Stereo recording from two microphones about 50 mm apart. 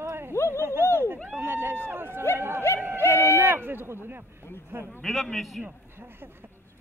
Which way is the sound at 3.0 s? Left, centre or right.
Left.